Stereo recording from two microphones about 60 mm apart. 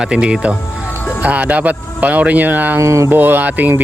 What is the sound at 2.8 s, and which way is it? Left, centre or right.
Speech, right.